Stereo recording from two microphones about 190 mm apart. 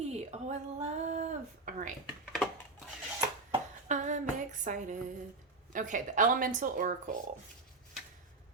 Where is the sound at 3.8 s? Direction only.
40° right (ahead or behind).